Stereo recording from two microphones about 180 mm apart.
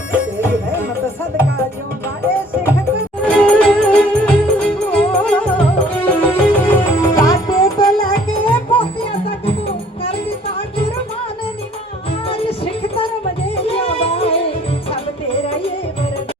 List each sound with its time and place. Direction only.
3.2 s music: 5° left (ahead or behind); by 10.2 s 30° left (ahead or behind)
12.3 s music: 30° left (ahead or behind)